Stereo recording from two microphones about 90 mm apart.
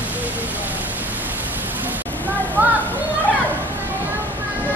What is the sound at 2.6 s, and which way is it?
Children playing, 25° right (ahead or behind).